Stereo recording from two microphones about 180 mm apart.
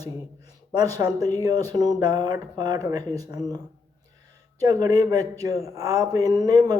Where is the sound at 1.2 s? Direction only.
20° right (ahead or behind).